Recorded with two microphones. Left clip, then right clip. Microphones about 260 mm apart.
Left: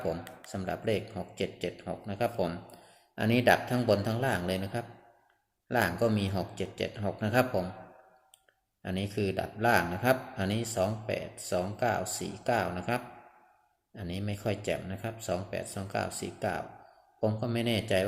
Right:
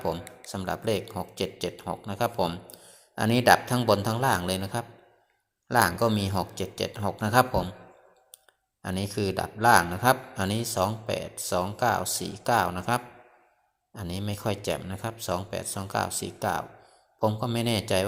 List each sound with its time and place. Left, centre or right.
0.5 s speech: centre
8.8 s speech: centre